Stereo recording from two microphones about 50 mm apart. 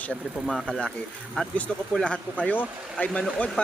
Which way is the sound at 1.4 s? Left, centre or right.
Centre.